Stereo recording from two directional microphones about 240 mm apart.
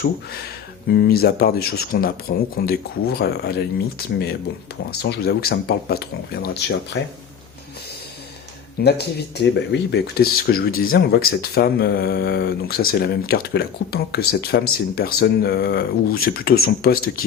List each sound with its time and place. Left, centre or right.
0.0 s speech: left
8.8 s speech: left